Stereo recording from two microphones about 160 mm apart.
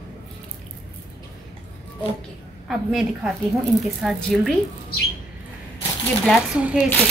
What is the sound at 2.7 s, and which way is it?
Speech, centre (ahead or behind).